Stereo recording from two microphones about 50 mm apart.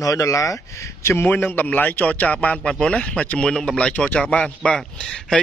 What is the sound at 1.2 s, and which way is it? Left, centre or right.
A man's voice, left.